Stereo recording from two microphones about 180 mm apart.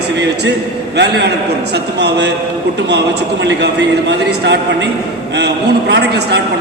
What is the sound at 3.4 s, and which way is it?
A man's voice, 75° right (ahead or behind).